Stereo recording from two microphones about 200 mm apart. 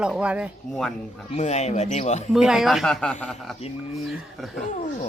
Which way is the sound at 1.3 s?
35° left (ahead or behind).